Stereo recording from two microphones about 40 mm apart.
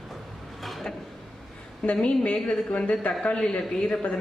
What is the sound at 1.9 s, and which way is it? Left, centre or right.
A woman's voice, left.